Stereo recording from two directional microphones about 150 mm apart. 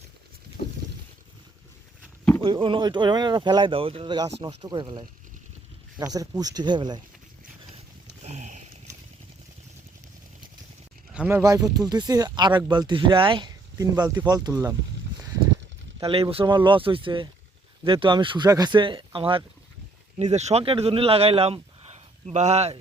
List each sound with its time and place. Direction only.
0.6 s rowboat: 40° left (ahead or behind)
2.4 s speech: 35° right (ahead or behind)
8.2 s boat: 50° right (ahead or behind)
11.3 s speech: 20° right (ahead or behind)
16.0 s speech: 35° right (ahead or behind)
20.1 s speech: 50° right (ahead or behind)